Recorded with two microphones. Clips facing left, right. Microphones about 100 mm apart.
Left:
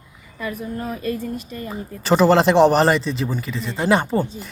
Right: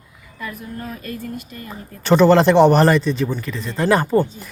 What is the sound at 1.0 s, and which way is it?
Speech, 25° left (ahead or behind).